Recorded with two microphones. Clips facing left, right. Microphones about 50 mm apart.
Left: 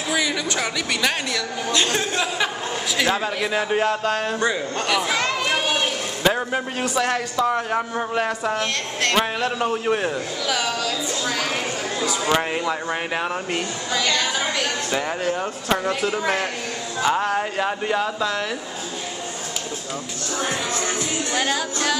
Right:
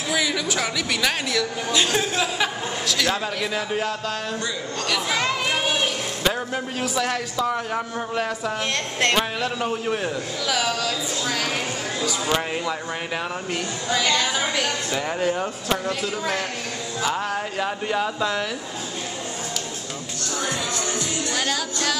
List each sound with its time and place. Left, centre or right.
0.1 s a woman's voice: centre
2.9 s speech: centre
4.8 s speech: centre
5.1 s children playing: centre
7.0 s speech: centre
10.5 s a woman's voice: centre
12.3 s speech: centre
13.8 s a woman's voice: centre
14.9 s a woman's voice: centre
15.8 s speech: centre
20.4 s music: left
21.3 s music: centre